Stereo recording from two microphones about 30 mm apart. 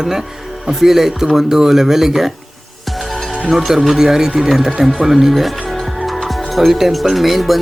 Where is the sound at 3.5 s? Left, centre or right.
Centre.